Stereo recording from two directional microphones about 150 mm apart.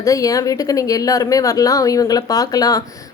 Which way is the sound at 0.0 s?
20° left (ahead or behind).